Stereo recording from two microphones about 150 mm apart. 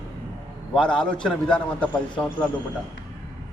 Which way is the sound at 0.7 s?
5° left (ahead or behind).